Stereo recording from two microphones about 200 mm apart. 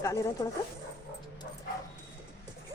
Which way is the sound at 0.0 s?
15° left (ahead or behind).